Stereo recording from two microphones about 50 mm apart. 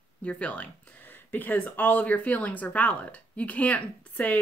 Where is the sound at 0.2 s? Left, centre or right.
Left.